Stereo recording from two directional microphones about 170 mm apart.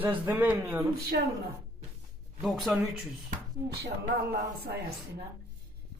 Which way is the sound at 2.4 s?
Centre (ahead or behind).